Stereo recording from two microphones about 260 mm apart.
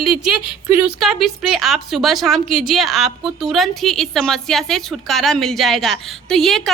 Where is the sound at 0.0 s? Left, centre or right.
Right.